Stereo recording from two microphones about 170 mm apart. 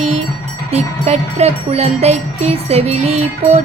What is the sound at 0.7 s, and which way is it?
Music, 40° right (ahead or behind).